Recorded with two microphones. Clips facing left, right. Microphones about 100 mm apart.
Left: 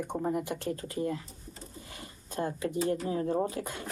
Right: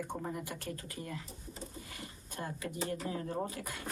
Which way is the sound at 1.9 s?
30° left (ahead or behind).